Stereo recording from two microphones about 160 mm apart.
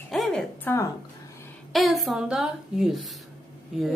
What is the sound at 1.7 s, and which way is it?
A woman's voice, centre (ahead or behind).